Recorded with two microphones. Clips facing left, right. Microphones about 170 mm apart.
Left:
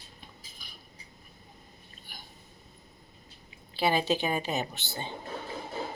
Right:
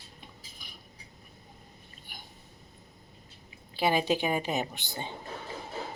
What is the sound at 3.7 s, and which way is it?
A woman's voice, 15° right (ahead or behind).